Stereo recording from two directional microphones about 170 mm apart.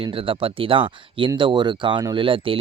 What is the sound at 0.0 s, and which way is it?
Speech, 30° right (ahead or behind).